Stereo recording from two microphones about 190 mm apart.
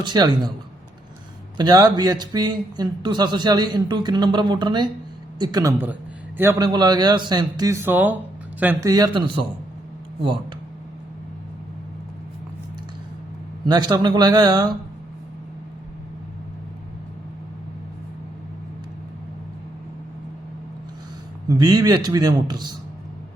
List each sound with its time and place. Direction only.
0.0 s a man's voice: 25° right (ahead or behind)
1.5 s a man's voice: 20° right (ahead or behind)
13.7 s a man's voice: 20° right (ahead or behind)
21.4 s a man's voice: 20° right (ahead or behind)